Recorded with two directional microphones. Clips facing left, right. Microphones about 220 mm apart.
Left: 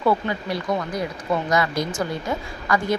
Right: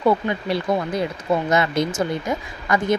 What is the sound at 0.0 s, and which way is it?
A woman's voice, 25° right (ahead or behind).